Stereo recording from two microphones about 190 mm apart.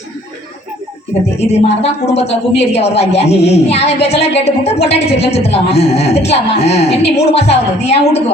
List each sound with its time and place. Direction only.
1.4 s a man's voice: 35° left (ahead or behind)